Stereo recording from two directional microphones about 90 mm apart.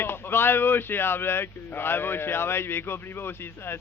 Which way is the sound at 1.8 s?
25° left (ahead or behind).